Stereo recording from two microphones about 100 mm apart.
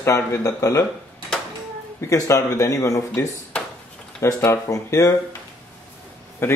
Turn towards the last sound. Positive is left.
turn(degrees=25)  # may be behind; listen again after turning